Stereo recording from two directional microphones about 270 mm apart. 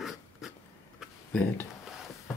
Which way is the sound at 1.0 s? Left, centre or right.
Centre.